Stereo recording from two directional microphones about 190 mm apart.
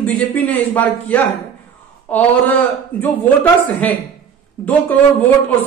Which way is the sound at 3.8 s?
5° left (ahead or behind).